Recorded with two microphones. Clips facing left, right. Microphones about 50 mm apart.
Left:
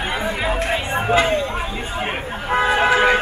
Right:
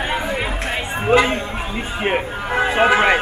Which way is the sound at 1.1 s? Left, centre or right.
Right.